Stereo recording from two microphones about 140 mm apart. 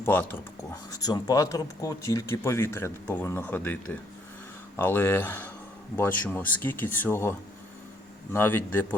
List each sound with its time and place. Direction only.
0.0 s speech: 15° left (ahead or behind)
4.8 s speech: 15° left (ahead or behind)